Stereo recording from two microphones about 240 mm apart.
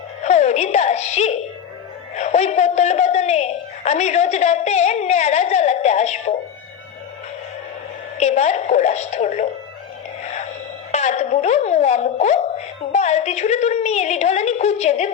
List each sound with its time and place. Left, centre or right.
0.2 s speech: left
8.2 s speech: left
10.9 s speech: left